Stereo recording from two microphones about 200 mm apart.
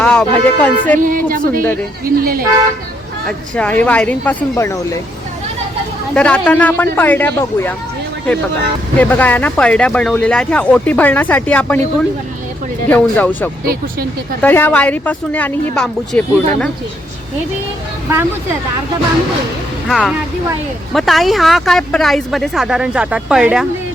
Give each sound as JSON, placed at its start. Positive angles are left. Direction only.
{"t": 0.0, "sound": "speech", "side_deg": 5}
{"t": 0.9, "sound": "speech", "side_deg": -45}
{"t": 3.5, "sound": "speech", "side_deg": 5}
{"t": 6.1, "sound": "speech", "side_deg": 5}
{"t": 9.0, "sound": "speech", "side_deg": 10}
{"t": 19.9, "sound": "speech", "side_deg": 0}